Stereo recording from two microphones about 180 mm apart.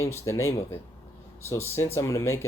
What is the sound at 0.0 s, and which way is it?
Speech, 15° left (ahead or behind).